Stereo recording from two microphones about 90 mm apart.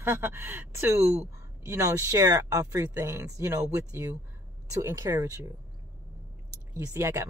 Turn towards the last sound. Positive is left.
turn(degrees=-30)  # may be behind; listen again after turning